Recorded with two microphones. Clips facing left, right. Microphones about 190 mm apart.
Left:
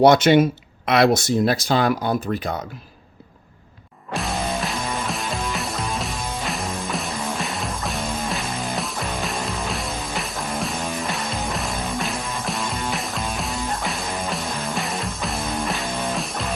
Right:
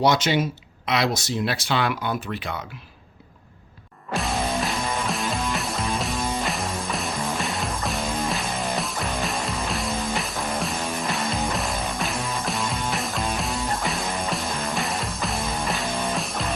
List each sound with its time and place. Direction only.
0.0 s speech: 55° left (ahead or behind)
4.1 s music: centre (ahead or behind)